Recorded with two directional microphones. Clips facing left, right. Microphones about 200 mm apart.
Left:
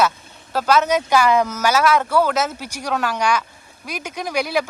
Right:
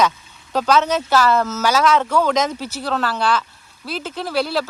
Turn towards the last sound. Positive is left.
turn(degrees=15)  # may be behind; listen again after turning